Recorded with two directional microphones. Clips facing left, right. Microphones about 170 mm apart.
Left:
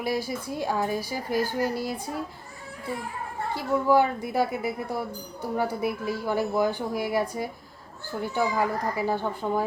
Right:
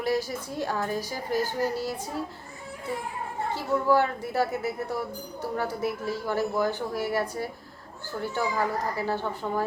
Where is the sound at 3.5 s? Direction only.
15° left (ahead or behind).